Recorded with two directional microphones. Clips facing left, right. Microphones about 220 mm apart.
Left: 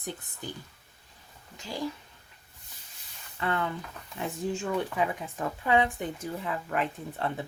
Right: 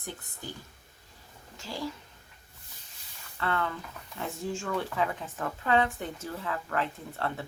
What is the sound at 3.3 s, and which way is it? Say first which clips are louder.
Speech: left 1 dB; 15° left (ahead or behind).